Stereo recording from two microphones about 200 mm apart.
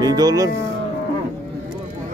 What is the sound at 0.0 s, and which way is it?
Speech, 20° right (ahead or behind).